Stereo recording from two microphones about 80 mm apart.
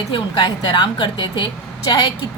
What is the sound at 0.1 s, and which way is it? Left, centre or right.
A woman's voice, left.